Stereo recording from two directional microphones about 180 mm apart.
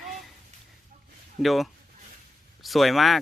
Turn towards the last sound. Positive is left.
turn(degrees=0)  # may be behind; listen again after turning